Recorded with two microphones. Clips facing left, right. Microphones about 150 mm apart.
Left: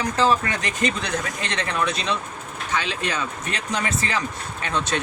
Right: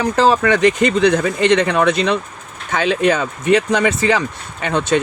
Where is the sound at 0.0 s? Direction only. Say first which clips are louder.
Right 7 dB; 75° right (ahead or behind).